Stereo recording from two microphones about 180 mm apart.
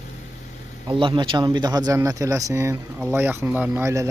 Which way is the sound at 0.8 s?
25° right (ahead or behind).